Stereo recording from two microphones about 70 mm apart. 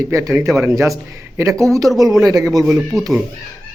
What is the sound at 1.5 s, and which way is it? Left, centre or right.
Speech, centre.